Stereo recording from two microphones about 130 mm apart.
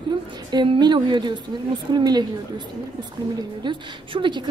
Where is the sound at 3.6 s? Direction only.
35° right (ahead or behind).